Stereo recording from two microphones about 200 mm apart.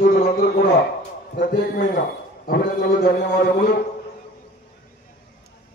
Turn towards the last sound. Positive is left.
turn(degrees=50)  # may be behind; listen again after turning